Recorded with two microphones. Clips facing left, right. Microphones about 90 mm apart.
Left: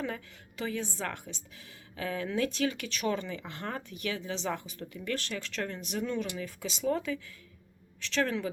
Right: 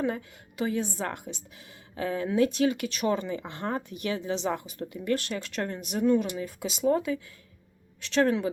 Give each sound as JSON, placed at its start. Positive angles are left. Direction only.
{"t": 0.0, "sound": "speech", "side_deg": -20}
{"t": 8.2, "sound": "speech", "side_deg": -20}